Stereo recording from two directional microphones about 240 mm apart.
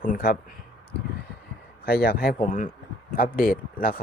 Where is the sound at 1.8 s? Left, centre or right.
Left.